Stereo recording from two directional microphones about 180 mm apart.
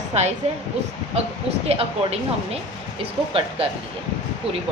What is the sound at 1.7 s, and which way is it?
Speech, 35° right (ahead or behind).